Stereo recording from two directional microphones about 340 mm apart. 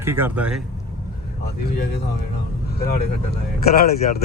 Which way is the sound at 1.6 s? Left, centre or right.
Left.